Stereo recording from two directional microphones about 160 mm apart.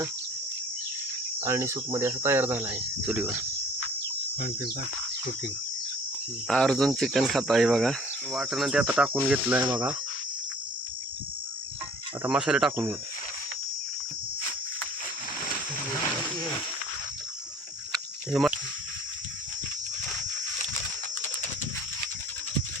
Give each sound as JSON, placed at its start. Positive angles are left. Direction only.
{"t": 1.4, "sound": "speech", "side_deg": -15}
{"t": 4.4, "sound": "speech", "side_deg": 80}
{"t": 6.5, "sound": "speech", "side_deg": 5}
{"t": 12.2, "sound": "speech", "side_deg": -5}
{"t": 17.9, "sound": "a sound", "side_deg": 0}